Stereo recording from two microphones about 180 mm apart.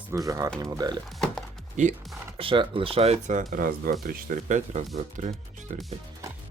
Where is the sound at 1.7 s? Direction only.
45° right (ahead or behind).